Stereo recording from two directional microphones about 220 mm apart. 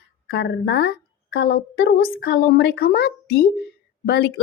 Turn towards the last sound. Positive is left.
turn(degrees=45)  # may be behind; listen again after turning